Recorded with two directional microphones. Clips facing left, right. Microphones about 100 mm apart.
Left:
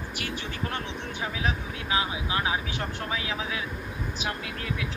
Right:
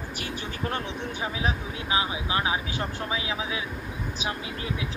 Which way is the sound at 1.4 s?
25° right (ahead or behind).